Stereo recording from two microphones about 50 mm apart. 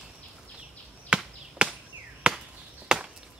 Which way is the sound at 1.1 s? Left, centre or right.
Right.